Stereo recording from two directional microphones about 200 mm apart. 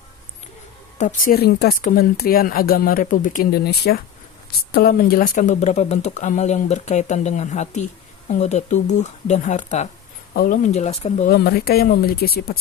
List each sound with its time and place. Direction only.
0.9 s speech: 40° left (ahead or behind)
11.3 s speech: 50° left (ahead or behind)